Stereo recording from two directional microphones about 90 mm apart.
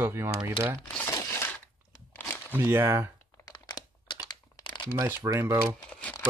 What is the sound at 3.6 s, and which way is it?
Crumpling, 55° left (ahead or behind).